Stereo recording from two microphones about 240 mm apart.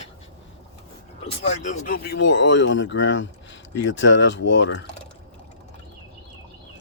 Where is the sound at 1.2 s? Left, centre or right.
Left.